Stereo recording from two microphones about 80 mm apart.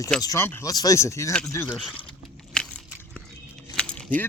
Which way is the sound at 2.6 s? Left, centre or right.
Centre.